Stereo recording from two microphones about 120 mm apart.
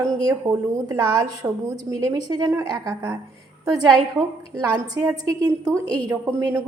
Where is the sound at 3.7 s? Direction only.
30° right (ahead or behind).